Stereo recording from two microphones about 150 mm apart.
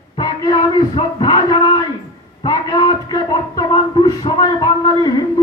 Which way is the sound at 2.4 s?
30° left (ahead or behind).